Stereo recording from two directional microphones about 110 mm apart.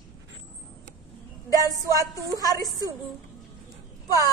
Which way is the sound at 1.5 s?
30° left (ahead or behind).